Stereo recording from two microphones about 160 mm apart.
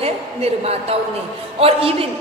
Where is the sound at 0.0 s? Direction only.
40° right (ahead or behind).